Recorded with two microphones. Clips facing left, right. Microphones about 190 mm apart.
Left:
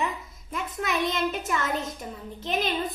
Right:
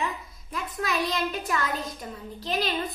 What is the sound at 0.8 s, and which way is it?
A child's voice, 25° left (ahead or behind).